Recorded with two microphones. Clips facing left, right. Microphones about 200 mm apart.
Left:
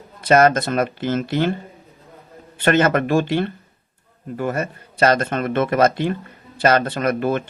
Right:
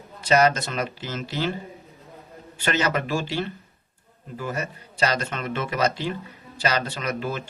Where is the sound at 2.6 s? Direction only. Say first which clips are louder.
Left 8 dB; 55° left (ahead or behind).